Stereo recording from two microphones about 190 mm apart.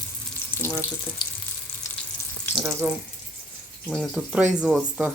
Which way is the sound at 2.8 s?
10° right (ahead or behind).